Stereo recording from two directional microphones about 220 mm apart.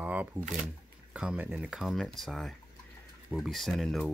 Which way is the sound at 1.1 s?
5° right (ahead or behind).